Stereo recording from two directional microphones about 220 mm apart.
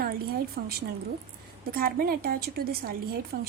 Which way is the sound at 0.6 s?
45° right (ahead or behind).